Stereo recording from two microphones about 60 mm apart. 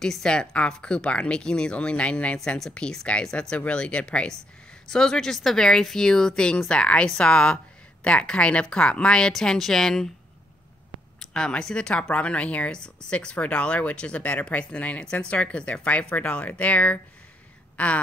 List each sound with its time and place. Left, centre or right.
0.0 s speech: centre
11.1 s a woman's voice: centre